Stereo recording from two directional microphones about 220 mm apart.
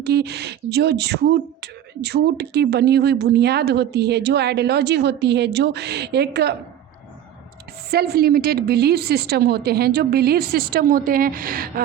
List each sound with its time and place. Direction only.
0.0 s speech: 50° right (ahead or behind)
7.9 s speech: 45° right (ahead or behind)